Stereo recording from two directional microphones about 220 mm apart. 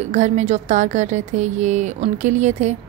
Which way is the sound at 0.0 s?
30° right (ahead or behind).